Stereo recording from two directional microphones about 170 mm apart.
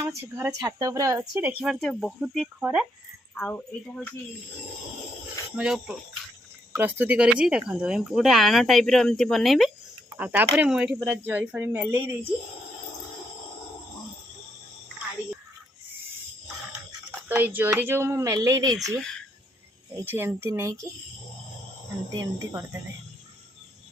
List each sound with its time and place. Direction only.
0.0 s speech: 15° right (ahead or behind)
1.3 s speech: 5° right (ahead or behind); by 4.1 s 10° left (ahead or behind)
5.5 s speech: 5° right (ahead or behind)
17.2 s speech: 10° right (ahead or behind)
18.9 s speech: 5° left (ahead or behind)
20.1 s speech: 15° right (ahead or behind)
22.1 s speech: 25° right (ahead or behind)